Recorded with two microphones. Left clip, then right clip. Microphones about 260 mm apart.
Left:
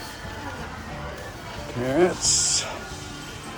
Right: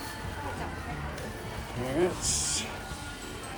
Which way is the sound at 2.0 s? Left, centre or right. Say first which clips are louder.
Left 8 dB; left.